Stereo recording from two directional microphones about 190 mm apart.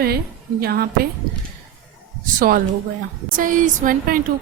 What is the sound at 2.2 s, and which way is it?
A woman's voice, 45° right (ahead or behind).